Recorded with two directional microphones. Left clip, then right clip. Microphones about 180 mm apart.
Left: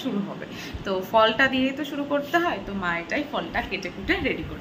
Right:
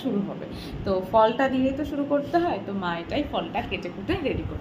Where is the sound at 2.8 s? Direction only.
25° left (ahead or behind).